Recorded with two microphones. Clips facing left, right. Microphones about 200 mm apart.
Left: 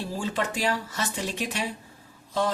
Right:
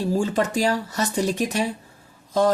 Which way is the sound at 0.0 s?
40° right (ahead or behind).